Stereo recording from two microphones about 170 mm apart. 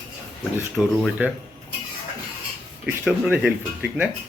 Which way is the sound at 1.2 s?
10° right (ahead or behind).